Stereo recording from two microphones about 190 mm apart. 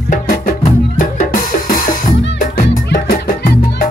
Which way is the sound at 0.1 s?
45° left (ahead or behind).